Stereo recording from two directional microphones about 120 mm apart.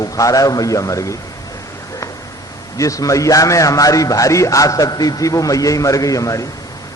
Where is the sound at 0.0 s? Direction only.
30° left (ahead or behind).